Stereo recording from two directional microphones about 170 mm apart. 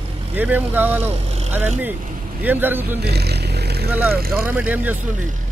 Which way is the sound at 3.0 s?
70° right (ahead or behind).